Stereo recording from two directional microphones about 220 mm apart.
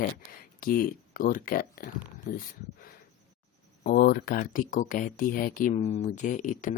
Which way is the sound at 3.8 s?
40° left (ahead or behind).